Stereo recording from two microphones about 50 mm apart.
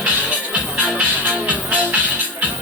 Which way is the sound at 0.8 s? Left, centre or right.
Right.